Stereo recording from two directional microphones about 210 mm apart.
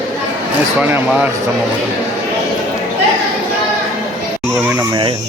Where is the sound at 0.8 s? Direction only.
10° right (ahead or behind).